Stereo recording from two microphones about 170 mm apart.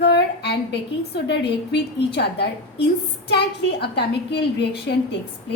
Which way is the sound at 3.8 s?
75° left (ahead or behind).